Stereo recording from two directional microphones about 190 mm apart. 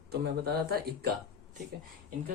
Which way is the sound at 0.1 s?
55° right (ahead or behind).